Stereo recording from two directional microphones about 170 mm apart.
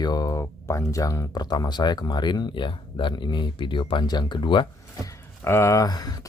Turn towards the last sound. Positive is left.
turn(degrees=25)  # may be behind; listen again after turning